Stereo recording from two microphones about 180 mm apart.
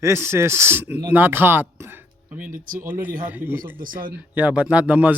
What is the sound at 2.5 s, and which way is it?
Speech, 50° right (ahead or behind).